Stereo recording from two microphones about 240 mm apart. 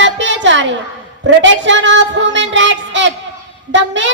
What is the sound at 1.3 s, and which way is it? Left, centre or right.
Child singing, right.